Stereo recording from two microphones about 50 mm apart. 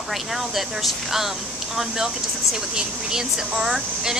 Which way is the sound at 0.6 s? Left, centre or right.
Centre.